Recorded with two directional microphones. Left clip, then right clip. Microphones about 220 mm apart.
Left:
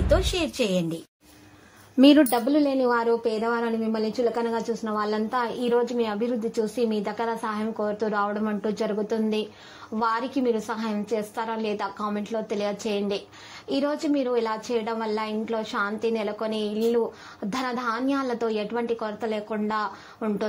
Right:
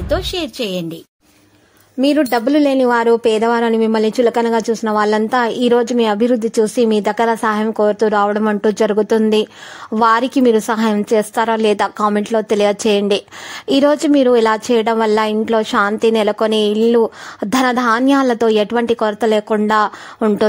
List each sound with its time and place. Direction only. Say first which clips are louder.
0.1 s a woman's voice: right 5 dB; 25° right (ahead or behind)
2.0 s speech: right 2 dB; 5° right (ahead or behind)
2.2 s a woman's voice: right 9 dB; 30° right (ahead or behind); by 16.7 s 50° right (ahead or behind)
16.9 s speech: right 11 dB; 40° right (ahead or behind)